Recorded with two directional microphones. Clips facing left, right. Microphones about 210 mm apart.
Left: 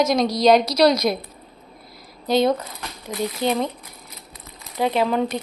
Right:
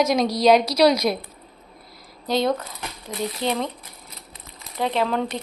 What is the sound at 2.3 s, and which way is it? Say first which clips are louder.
Speech: left 3 dB; centre (ahead or behind).